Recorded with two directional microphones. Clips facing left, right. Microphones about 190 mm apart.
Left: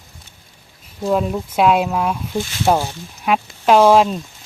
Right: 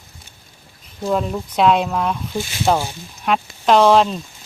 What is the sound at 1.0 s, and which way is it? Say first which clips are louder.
Speech: left 2 dB; 5° left (ahead or behind).